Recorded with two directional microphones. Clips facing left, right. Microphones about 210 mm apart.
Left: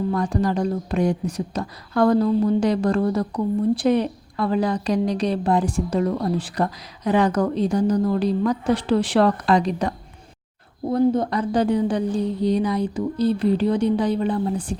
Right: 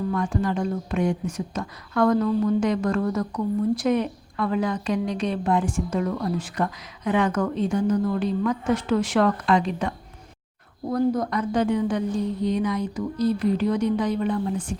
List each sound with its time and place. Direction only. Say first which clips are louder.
0.1 s speech: left 3 dB; 40° left (ahead or behind)
10.8 s speech: left 4 dB; 25° left (ahead or behind)